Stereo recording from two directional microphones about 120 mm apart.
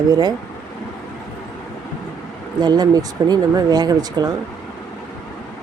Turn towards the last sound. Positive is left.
turn(degrees=-35)  # may be behind; listen again after turning